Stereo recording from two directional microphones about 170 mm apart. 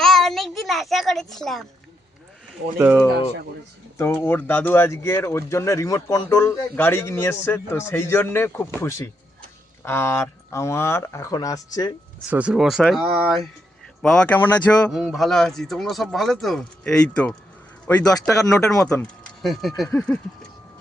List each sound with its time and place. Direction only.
0.0 s child singing: centre (ahead or behind)
2.7 s speech: 10° right (ahead or behind)
3.9 s speech: 15° left (ahead or behind)
12.3 s speech: 5° right (ahead or behind); by 18.0 s 15° left (ahead or behind)
18.9 s speech: 5° left (ahead or behind)